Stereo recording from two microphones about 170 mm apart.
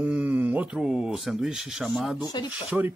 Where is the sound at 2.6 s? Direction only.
10° right (ahead or behind).